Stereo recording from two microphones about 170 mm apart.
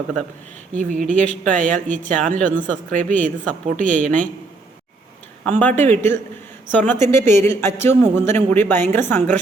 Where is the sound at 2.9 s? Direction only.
50° right (ahead or behind).